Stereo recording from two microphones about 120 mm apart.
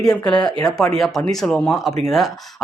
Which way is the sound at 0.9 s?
Centre (ahead or behind).